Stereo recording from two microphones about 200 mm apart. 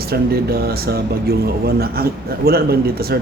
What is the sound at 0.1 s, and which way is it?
Speech, 50° right (ahead or behind).